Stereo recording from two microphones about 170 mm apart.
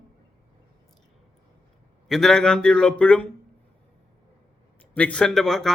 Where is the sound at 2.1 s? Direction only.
Centre (ahead or behind).